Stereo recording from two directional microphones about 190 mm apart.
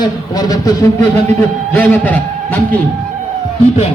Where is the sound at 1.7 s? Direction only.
10° left (ahead or behind).